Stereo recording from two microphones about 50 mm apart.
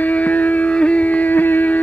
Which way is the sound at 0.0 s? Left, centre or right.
Left.